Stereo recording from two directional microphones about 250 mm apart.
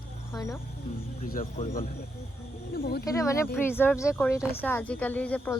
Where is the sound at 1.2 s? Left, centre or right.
Left.